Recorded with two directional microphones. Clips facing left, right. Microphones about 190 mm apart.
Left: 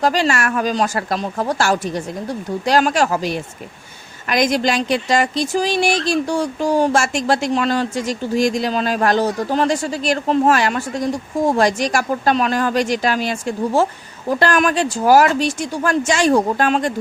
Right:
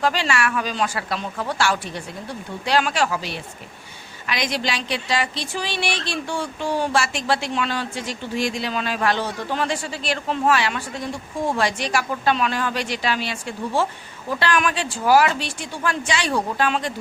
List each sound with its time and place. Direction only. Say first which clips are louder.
0.0 s speech: left 4 dB; 40° left (ahead or behind)